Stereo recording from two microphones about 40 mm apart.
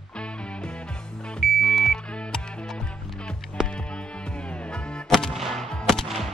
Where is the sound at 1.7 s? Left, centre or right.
Centre.